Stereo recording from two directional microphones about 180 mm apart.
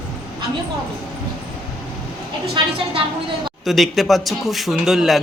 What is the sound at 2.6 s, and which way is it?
Speech, 25° right (ahead or behind).